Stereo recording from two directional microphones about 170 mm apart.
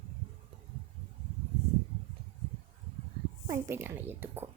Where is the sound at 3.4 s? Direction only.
15° right (ahead or behind).